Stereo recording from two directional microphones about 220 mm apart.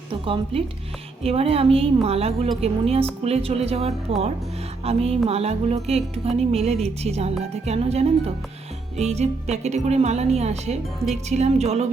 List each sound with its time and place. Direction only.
1.2 s speech: 25° right (ahead or behind)